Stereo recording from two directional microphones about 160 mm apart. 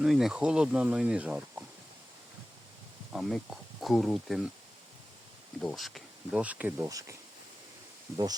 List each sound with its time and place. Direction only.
0.0 s speech: centre (ahead or behind)
3.1 s speech: centre (ahead or behind)
5.6 s speech: centre (ahead or behind)
6.8 s speech: 20° right (ahead or behind)